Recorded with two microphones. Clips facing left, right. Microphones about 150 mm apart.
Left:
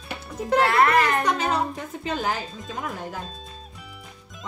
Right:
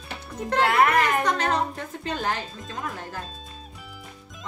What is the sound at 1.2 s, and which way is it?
Speech, 5° left (ahead or behind).